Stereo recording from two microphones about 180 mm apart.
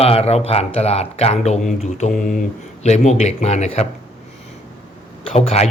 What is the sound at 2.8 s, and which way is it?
Speech, 40° left (ahead or behind).